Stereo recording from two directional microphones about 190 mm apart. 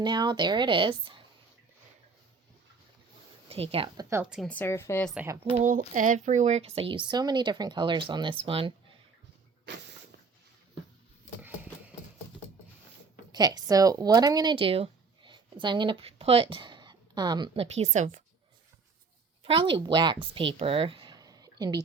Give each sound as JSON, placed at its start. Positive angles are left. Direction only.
{"t": 0.0, "sound": "speech", "side_deg": -25}
{"t": 3.5, "sound": "a woman's voice", "side_deg": -30}
{"t": 4.1, "sound": "speech", "side_deg": -5}
{"t": 4.4, "sound": "speech", "side_deg": 10}
{"t": 5.1, "sound": "speech", "side_deg": -10}
{"t": 5.4, "sound": "speech", "side_deg": -30}
{"t": 13.3, "sound": "speech", "side_deg": -20}
{"t": 19.5, "sound": "speech", "side_deg": -25}